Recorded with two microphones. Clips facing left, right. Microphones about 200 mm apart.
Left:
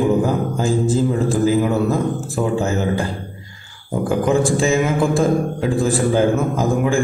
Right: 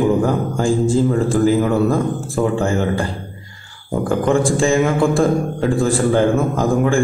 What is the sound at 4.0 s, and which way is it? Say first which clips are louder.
Speech: right 1 dB; 5° left (ahead or behind).